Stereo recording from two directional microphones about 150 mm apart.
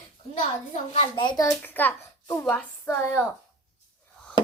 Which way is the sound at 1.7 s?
15° left (ahead or behind).